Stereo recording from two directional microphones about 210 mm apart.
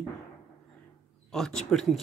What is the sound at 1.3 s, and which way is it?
Speech, 5° left (ahead or behind).